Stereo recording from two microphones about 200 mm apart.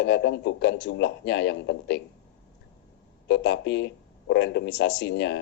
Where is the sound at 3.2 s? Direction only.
60° left (ahead or behind).